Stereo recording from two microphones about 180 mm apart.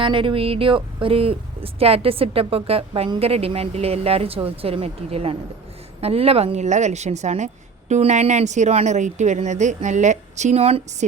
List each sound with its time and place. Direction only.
0.0 s speech: 30° right (ahead or behind)